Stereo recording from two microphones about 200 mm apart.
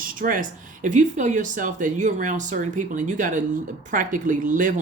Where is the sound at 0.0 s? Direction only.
45° right (ahead or behind).